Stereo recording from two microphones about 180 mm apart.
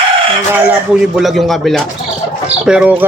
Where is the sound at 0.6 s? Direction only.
5° right (ahead or behind).